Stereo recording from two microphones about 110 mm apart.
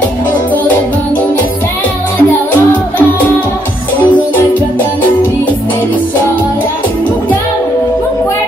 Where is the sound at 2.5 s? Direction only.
15° left (ahead or behind).